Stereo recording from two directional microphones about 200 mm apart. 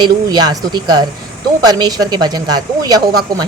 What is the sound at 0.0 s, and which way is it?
Speech, 20° right (ahead or behind).